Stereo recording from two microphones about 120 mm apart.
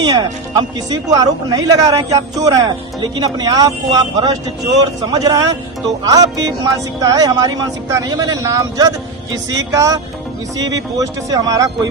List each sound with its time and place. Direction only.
0.0 s speech: 35° right (ahead or behind)